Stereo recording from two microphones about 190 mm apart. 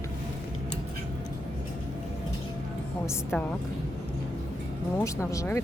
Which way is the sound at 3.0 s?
10° left (ahead or behind).